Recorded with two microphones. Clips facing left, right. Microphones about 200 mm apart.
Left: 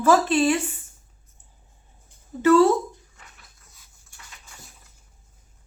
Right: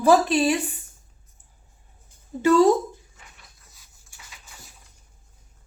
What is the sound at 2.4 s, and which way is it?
Speech, 15° right (ahead or behind).